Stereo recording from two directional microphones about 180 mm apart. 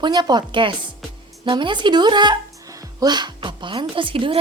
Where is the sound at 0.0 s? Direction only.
25° right (ahead or behind).